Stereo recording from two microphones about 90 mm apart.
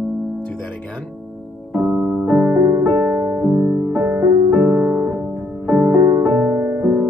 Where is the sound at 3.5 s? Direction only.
25° right (ahead or behind).